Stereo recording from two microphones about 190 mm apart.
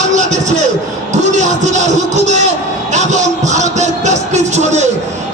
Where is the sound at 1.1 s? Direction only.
40° right (ahead or behind).